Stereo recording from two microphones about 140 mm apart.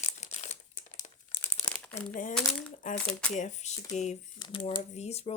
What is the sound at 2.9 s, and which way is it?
Speech, 10° left (ahead or behind).